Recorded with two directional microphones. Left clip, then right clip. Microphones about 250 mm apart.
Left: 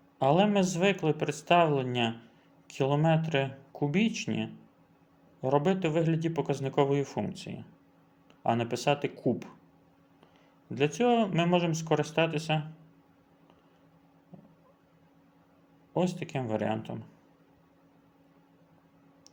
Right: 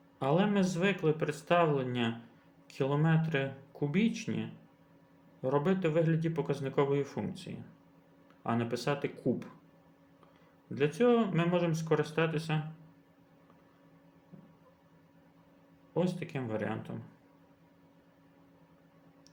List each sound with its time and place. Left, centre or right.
0.2 s speech: left
10.8 s speech: left
16.0 s speech: left